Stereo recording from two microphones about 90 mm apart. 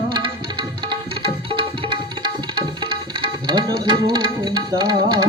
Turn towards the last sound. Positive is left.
turn(degrees=-55)  # may be behind; listen again after turning